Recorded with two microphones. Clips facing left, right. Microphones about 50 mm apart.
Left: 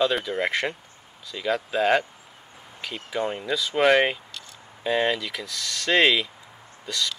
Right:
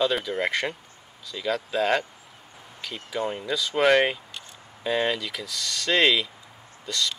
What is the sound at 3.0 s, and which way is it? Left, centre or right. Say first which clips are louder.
Speech: left 1 dB; centre.